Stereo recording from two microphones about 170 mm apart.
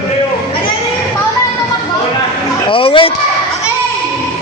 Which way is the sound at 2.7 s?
30° left (ahead or behind).